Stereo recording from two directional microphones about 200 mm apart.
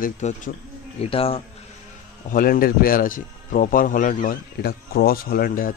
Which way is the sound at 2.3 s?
45° left (ahead or behind).